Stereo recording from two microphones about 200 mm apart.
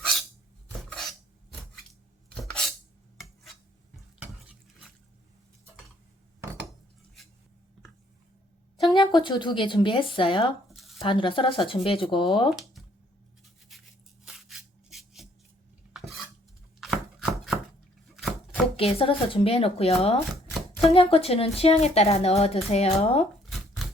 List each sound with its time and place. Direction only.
0.0 s filing: 5° left (ahead or behind)
2.3 s a sound: 5° left (ahead or behind)
3.9 s stir: centre (ahead or behind)
8.9 s speech: 25° left (ahead or behind)
10.8 s a sound: centre (ahead or behind)
11.0 s speech: 25° left (ahead or behind)
13.4 s a sound: centre (ahead or behind)
15.9 s dishes: centre (ahead or behind)
18.2 s chopping: centre (ahead or behind)
18.8 s speech: 30° left (ahead or behind)